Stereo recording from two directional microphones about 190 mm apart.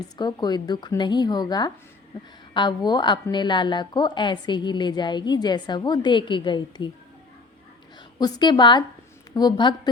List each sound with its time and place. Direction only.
0.2 s a woman's voice: 20° left (ahead or behind)
8.2 s a woman's voice: 20° left (ahead or behind)